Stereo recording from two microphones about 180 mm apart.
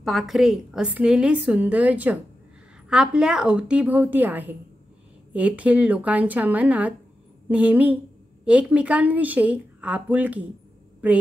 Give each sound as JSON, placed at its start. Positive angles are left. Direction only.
{"t": 0.0, "sound": "a woman's voice", "side_deg": 0}